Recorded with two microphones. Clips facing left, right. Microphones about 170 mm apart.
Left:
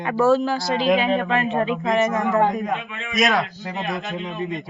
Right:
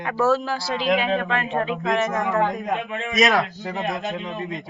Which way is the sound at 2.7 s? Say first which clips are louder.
Right 4 dB; 40° right (ahead or behind).